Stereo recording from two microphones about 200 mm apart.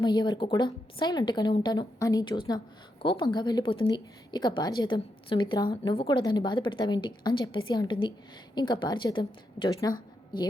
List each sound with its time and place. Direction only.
0.0 s speech: 20° left (ahead or behind)